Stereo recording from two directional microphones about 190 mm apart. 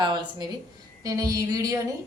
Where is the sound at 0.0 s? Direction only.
25° right (ahead or behind).